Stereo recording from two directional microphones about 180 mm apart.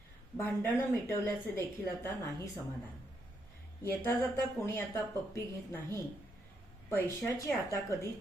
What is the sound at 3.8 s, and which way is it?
Speech, 10° left (ahead or behind).